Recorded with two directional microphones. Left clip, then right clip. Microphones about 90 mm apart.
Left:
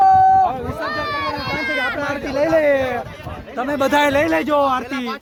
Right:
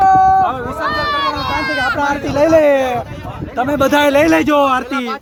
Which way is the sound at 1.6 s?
50° right (ahead or behind).